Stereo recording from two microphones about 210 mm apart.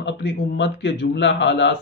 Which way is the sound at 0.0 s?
55° left (ahead or behind).